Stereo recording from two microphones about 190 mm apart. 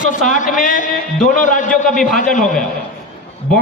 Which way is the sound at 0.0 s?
40° left (ahead or behind).